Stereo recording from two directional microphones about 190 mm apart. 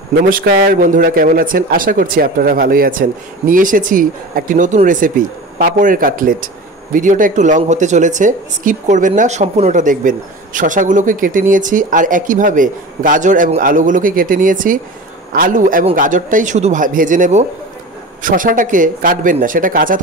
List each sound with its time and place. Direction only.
0.3 s a man's voice: 50° right (ahead or behind)